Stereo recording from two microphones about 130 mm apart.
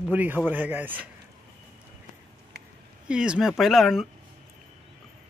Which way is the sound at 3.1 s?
5° right (ahead or behind).